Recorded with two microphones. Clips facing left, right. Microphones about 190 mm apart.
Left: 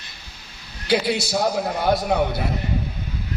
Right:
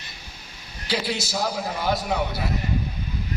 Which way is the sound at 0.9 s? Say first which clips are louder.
Left 6 dB; 60° left (ahead or behind).